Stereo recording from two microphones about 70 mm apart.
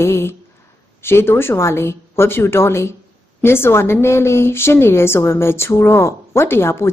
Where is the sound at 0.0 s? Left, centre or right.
Left.